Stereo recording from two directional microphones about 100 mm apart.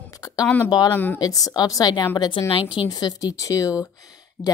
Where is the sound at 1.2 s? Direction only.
40° left (ahead or behind).